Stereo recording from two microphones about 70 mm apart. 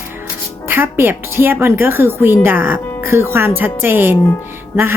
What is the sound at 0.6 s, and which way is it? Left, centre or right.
A woman's voice, right.